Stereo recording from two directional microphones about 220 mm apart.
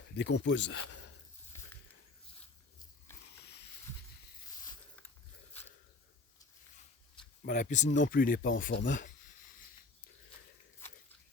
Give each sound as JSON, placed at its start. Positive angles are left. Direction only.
{"t": 0.2, "sound": "speech", "side_deg": 55}
{"t": 1.5, "sound": "a sound", "side_deg": 10}
{"t": 7.4, "sound": "speech", "side_deg": 35}